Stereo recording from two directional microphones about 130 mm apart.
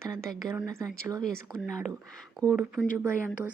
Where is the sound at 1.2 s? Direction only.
5° left (ahead or behind).